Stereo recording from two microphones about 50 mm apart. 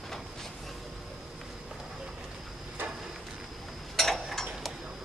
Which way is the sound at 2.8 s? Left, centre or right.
Right.